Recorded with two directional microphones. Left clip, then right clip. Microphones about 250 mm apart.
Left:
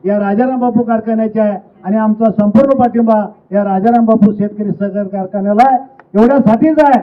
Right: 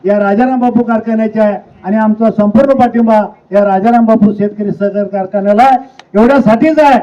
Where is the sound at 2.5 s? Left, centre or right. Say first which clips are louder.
Right 1 dB; right.